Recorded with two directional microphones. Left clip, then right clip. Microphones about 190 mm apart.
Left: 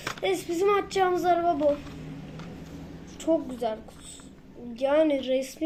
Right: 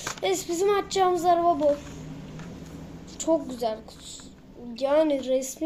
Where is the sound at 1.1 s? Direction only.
50° right (ahead or behind).